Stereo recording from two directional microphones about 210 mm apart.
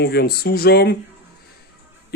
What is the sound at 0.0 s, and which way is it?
Speech, 50° left (ahead or behind).